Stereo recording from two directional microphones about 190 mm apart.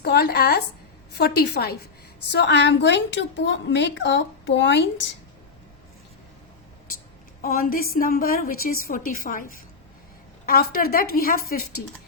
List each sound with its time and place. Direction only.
0.0 s a woman's voice: 60° left (ahead or behind)
7.4 s a woman's voice: 50° left (ahead or behind)